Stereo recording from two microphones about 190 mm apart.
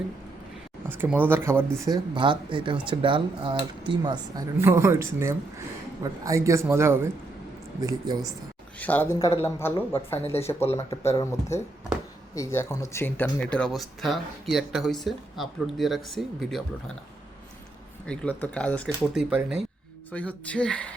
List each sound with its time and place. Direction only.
0.9 s a man's voice: 10° right (ahead or behind)
4.5 s a man's voice: 15° right (ahead or behind)
8.8 s speech: 10° left (ahead or behind)
18.0 s speech: 5° left (ahead or behind)
19.3 s speech: 5° right (ahead or behind)
20.1 s speech: 5° left (ahead or behind)